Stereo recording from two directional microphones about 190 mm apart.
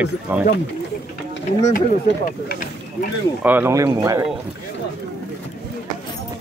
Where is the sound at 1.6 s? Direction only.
40° left (ahead or behind).